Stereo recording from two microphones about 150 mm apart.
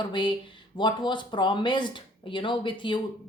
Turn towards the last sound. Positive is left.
turn(degrees=35)  # may be behind; listen again after turning